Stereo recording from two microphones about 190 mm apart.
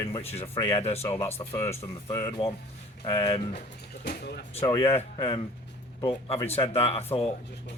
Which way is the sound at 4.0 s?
55° left (ahead or behind).